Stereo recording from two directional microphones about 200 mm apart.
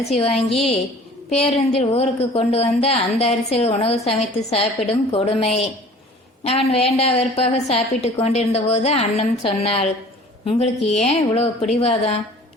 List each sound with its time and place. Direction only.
0.1 s a woman's voice: 30° left (ahead or behind)